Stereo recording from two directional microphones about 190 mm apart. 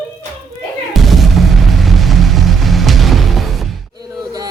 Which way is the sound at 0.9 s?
Centre (ahead or behind).